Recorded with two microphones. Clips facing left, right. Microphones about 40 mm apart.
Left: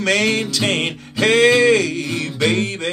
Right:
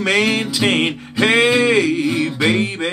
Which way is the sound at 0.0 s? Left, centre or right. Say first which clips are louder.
Right 1 dB; centre.